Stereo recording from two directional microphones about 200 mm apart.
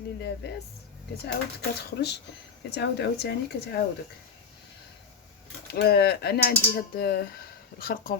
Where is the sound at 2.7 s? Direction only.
55° left (ahead or behind).